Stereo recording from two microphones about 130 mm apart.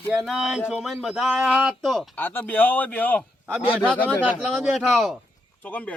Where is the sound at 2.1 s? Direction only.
15° left (ahead or behind).